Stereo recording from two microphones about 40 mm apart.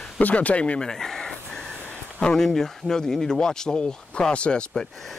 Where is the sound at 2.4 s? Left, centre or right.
Centre; by 4.7 s left.